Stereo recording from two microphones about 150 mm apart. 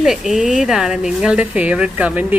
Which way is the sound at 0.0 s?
Centre (ahead or behind).